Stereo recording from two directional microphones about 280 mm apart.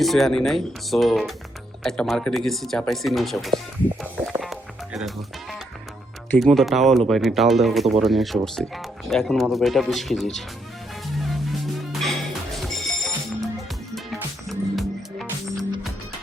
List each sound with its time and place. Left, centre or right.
0.0 s speech: centre
4.0 s music: centre
6.3 s speech: centre
11.0 s music: centre